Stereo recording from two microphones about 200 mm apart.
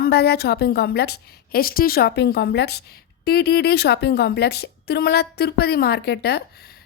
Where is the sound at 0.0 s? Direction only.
55° left (ahead or behind).